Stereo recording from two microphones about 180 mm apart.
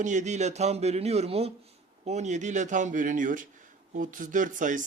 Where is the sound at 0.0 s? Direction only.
40° right (ahead or behind).